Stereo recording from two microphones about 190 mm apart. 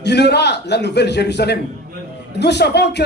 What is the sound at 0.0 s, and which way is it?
A man's voice, 60° left (ahead or behind).